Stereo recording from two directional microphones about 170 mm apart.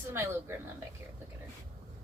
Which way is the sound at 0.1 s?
15° right (ahead or behind).